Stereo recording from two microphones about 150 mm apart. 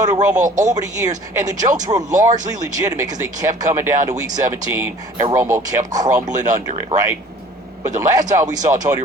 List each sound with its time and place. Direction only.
0.0 s speech: 25° right (ahead or behind)